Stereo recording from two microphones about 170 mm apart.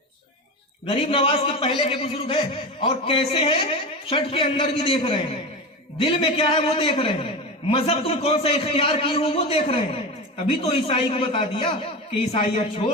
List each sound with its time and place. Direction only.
0.9 s a man's voice: 30° left (ahead or behind)